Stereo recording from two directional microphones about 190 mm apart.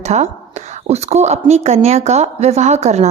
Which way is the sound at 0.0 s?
35° right (ahead or behind).